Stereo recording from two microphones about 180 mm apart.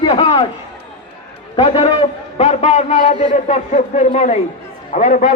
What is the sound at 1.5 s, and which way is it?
A man's voice, 30° left (ahead or behind).